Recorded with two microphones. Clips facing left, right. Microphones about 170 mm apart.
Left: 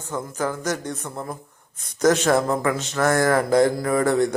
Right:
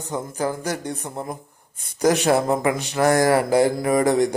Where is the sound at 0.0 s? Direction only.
15° right (ahead or behind).